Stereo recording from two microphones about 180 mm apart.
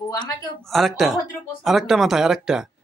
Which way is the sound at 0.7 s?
Centre (ahead or behind).